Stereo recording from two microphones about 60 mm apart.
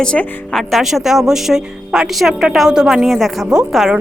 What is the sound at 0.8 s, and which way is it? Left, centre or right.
A woman's voice, centre.